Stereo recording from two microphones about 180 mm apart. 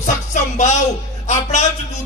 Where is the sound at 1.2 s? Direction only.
40° left (ahead or behind).